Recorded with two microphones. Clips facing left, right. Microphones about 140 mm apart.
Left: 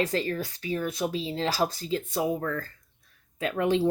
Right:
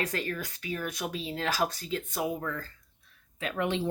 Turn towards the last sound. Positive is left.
turn(degrees=35)  # may be behind; listen again after turning